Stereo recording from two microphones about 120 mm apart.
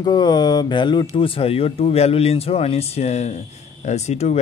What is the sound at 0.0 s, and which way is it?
Speech, 35° left (ahead or behind).